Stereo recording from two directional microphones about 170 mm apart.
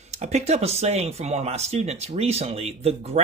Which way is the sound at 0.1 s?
40° right (ahead or behind).